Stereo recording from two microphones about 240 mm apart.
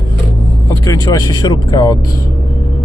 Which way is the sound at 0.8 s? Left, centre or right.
Centre.